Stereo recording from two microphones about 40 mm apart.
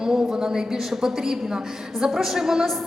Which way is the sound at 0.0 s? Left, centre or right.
Centre.